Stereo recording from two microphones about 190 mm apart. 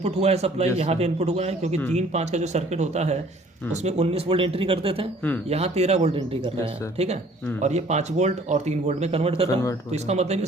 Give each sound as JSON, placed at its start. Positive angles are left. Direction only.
{"t": 0.0, "sound": "speech", "side_deg": -35}
{"t": 7.6, "sound": "speech", "side_deg": -35}